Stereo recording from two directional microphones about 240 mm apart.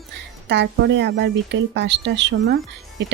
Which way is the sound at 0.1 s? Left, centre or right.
Right.